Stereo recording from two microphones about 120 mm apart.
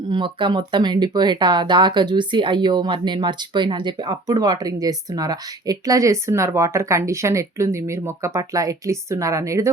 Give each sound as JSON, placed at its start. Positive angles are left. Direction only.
{"t": 0.1, "sound": "speech", "side_deg": -40}